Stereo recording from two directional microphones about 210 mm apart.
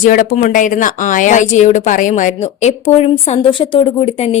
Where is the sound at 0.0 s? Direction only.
40° left (ahead or behind).